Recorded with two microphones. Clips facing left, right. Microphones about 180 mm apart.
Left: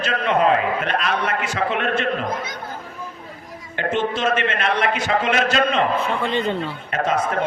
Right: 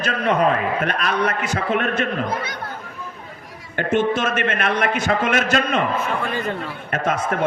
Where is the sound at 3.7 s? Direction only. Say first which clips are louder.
Right 3 dB; 50° right (ahead or behind).